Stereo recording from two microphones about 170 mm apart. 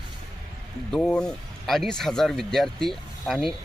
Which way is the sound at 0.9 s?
5° left (ahead or behind).